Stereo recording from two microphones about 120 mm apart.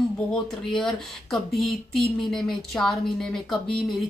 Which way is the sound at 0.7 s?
5° left (ahead or behind).